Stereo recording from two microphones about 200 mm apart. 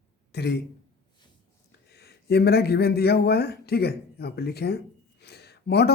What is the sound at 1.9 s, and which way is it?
Speech, 55° left (ahead or behind).